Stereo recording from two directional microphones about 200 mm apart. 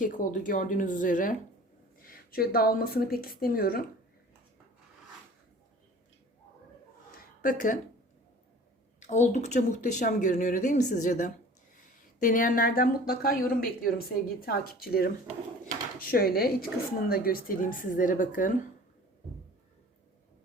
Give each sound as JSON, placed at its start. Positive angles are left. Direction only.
{"t": 0.0, "sound": "a woman's voice", "side_deg": 40}
{"t": 7.4, "sound": "speech", "side_deg": 40}
{"t": 9.0, "sound": "a woman's voice", "side_deg": 35}